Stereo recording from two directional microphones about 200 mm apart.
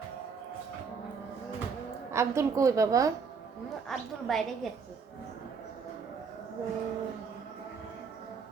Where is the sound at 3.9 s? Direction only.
Centre (ahead or behind).